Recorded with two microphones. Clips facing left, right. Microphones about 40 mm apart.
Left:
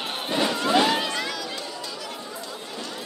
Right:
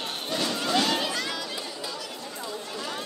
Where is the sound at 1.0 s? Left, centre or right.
Centre.